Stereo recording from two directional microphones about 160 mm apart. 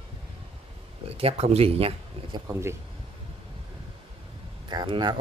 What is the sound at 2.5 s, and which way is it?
Speech, 15° right (ahead or behind).